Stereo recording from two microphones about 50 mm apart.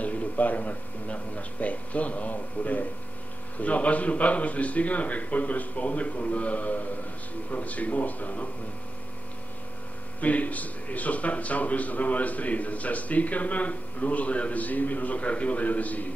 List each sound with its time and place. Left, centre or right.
0.0 s a man's voice: left
10.2 s a man's voice: left